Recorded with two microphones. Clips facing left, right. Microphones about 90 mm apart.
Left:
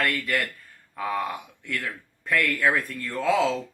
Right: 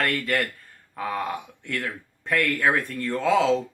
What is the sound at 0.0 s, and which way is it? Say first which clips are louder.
Speech: right 1 dB; 30° right (ahead or behind).